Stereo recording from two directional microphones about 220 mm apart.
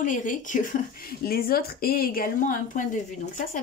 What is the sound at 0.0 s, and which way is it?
Speech, 35° left (ahead or behind).